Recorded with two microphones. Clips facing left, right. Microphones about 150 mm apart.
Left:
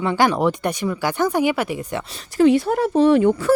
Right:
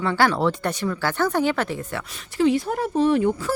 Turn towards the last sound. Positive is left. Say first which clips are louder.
# left 5 dB
turn(degrees=70)  # may be behind; listen again after turning